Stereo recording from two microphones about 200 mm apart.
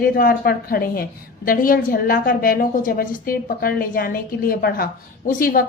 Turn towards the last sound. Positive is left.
turn(degrees=45)  # may be behind; listen again after turning